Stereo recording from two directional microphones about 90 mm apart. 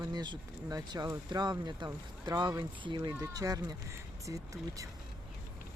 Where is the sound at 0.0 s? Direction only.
50° right (ahead or behind).